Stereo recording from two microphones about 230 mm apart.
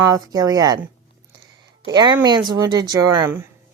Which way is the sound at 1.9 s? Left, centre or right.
Centre.